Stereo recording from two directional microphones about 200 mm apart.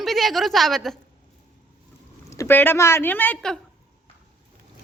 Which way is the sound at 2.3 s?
15° left (ahead or behind).